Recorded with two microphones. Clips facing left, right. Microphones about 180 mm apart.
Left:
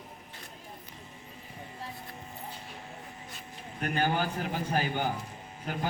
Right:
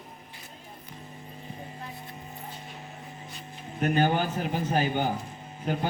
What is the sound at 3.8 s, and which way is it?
A man's voice, 25° right (ahead or behind).